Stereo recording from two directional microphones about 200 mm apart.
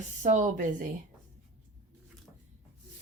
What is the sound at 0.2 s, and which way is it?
Speech, 40° right (ahead or behind).